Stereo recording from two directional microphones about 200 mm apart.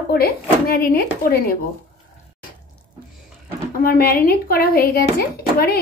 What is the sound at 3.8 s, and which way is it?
Speech, 45° left (ahead or behind).